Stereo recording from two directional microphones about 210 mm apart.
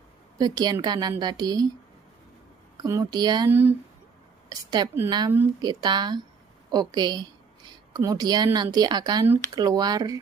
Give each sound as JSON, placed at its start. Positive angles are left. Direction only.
{"t": 0.4, "sound": "a woman's voice", "side_deg": -20}
{"t": 2.8, "sound": "a woman's voice", "side_deg": -20}